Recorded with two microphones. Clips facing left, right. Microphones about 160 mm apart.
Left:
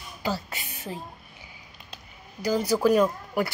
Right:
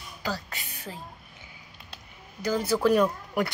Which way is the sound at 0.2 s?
15° left (ahead or behind).